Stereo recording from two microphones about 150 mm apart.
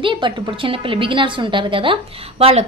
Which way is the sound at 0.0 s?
35° right (ahead or behind).